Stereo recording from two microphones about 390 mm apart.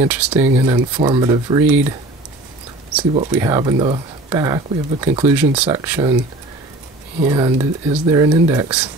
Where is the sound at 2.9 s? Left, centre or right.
Centre.